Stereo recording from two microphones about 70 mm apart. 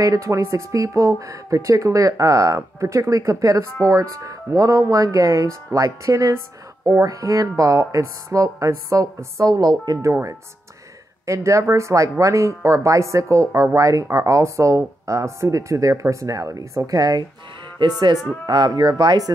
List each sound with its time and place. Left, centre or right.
0.0 s a woman's voice: right
11.2 s speech: right
17.8 s speech: right